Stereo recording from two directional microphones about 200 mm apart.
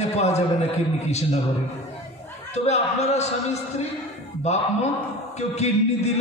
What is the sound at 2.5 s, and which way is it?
Speech, 35° left (ahead or behind).